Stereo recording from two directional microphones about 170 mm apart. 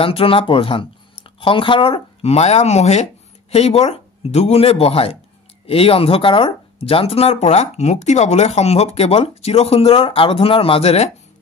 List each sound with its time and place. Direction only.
0.0 s speech: 35° left (ahead or behind)